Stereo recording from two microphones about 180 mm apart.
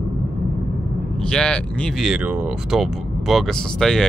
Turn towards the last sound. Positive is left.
turn(degrees=5)  # may be behind; listen again after turning